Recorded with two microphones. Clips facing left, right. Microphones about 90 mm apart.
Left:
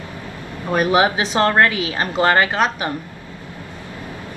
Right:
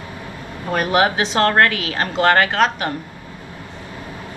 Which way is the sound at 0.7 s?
20° left (ahead or behind).